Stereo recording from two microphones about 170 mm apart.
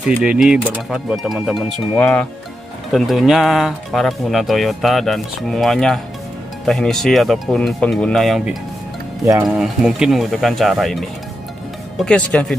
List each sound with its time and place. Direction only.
0.0 s speech: 5° right (ahead or behind)
9.2 s speech: 20° right (ahead or behind)
9.5 s speech: centre (ahead or behind)